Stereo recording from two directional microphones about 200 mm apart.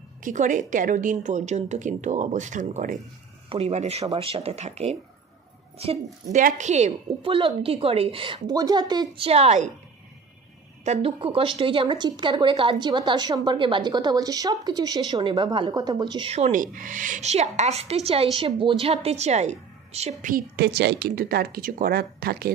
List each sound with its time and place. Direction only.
0.2 s a woman's voice: 40° right (ahead or behind)
6.3 s speech: 40° right (ahead or behind)
10.8 s speech: 30° right (ahead or behind); by 22.5 s 50° right (ahead or behind)